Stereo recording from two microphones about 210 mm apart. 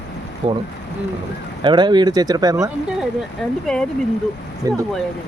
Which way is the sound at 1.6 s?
20° right (ahead or behind).